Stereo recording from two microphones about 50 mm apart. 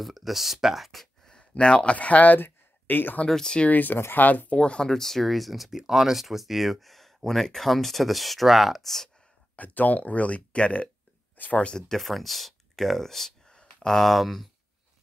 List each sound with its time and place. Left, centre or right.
0.0 s speech: centre
1.5 s speech: centre; by 3.3 s left
3.3 s speech: centre
3.5 s speech: left
4.6 s speech: left
4.8 s speech: centre
9.6 s speech: left
11.3 s speech: left
11.6 s speech: centre
12.0 s speech: centre